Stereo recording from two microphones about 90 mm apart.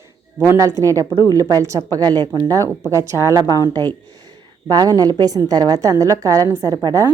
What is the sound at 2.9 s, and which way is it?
Speech, 30° right (ahead or behind).